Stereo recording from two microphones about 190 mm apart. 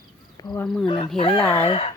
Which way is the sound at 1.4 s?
10° left (ahead or behind).